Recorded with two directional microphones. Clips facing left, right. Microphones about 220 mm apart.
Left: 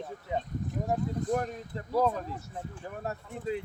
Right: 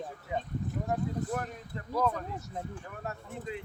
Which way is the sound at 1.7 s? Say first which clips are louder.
Left 3 dB; 35° left (ahead or behind).